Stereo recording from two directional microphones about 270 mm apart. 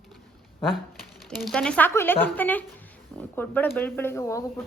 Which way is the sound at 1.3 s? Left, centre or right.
Centre.